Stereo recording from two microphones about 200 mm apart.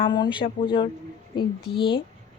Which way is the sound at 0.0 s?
25° left (ahead or behind).